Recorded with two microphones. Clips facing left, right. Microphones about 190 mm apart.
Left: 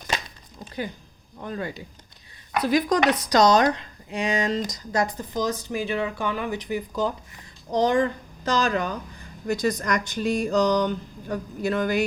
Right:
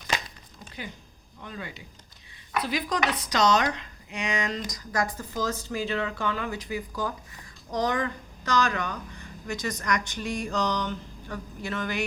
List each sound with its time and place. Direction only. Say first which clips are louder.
1.4 s speech: left 8 dB; 45° left (ahead or behind)